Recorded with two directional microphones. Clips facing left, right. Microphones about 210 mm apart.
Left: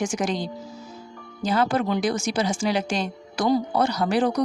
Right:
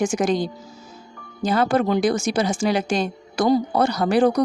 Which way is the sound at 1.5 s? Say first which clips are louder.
Right 3 dB; 50° right (ahead or behind).